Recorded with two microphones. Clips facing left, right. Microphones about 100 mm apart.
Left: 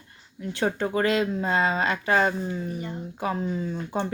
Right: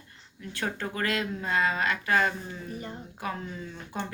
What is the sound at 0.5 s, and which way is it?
Speech, 25° left (ahead or behind).